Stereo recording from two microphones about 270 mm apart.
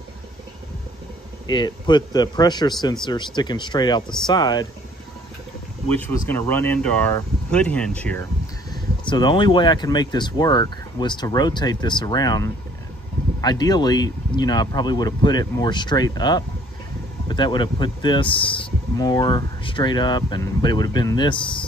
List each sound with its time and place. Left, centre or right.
1.5 s speech: centre
5.9 s speech: centre
9.0 s speech: centre